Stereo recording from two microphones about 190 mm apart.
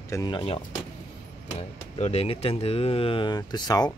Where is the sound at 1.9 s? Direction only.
35° left (ahead or behind).